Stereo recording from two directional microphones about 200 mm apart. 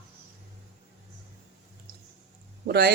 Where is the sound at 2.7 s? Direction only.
55° right (ahead or behind).